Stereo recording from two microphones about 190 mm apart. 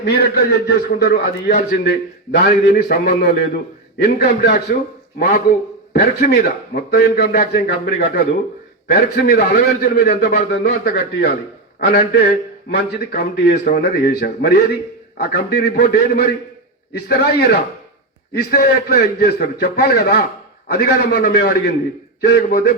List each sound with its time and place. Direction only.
0.0 s a man's voice: 60° left (ahead or behind)
2.4 s a man's voice: 40° left (ahead or behind); by 22.7 s 60° left (ahead or behind)